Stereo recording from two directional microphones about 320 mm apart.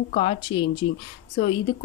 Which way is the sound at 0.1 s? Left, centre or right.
Centre.